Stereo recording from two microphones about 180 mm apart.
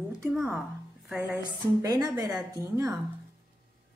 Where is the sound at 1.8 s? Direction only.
20° right (ahead or behind).